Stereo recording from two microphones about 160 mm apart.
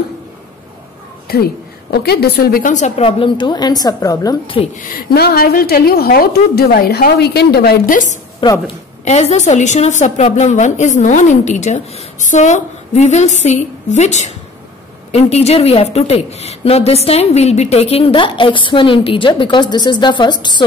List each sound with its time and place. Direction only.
1.2 s a woman's voice: 70° left (ahead or behind)
2.7 s a woman's voice: 40° left (ahead or behind); by 4.6 s 20° left (ahead or behind)
4.7 s a woman's voice: 70° left (ahead or behind); by 8.2 s 55° left (ahead or behind)
8.4 s a woman's voice: 30° left (ahead or behind)
9.0 s a woman's voice: 45° left (ahead or behind); by 20.6 s 30° left (ahead or behind)